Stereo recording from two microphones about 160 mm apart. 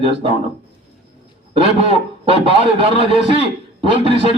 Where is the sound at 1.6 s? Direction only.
35° right (ahead or behind).